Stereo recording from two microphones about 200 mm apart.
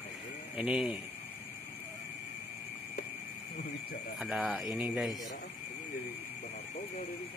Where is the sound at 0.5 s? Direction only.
5° right (ahead or behind).